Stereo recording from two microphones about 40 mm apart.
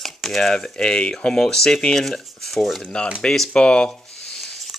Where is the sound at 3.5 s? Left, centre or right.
Left.